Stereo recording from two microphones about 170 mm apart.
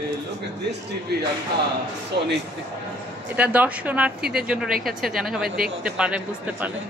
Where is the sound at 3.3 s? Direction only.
10° right (ahead or behind).